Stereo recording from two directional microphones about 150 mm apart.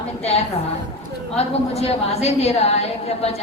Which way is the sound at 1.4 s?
45° left (ahead or behind).